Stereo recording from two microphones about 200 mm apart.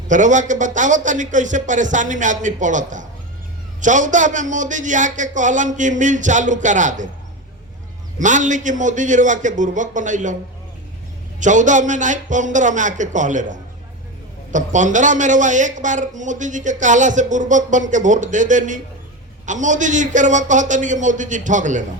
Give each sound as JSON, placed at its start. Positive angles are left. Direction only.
{"t": 0.1, "sound": "a man's voice", "side_deg": -40}
{"t": 8.2, "sound": "a man's voice", "side_deg": -40}
{"t": 11.3, "sound": "a man's voice", "side_deg": -40}